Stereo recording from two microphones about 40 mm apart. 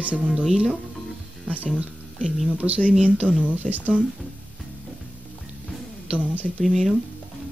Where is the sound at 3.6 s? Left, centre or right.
Left.